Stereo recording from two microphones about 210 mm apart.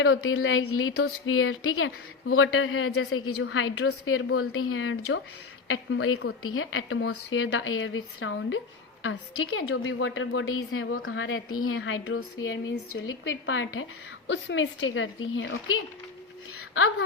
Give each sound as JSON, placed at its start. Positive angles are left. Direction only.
{"t": 0.0, "sound": "a woman's voice", "side_deg": 75}
{"t": 9.0, "sound": "a woman's voice", "side_deg": 80}